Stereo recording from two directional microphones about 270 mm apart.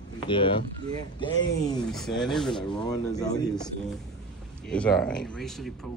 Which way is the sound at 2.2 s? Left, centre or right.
Centre.